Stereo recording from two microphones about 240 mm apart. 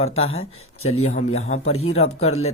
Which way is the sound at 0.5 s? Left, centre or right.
Left.